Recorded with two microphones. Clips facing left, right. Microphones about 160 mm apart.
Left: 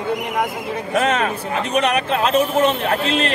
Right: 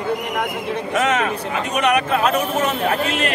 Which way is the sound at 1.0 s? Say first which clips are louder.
Left 1 dB; 30° left (ahead or behind).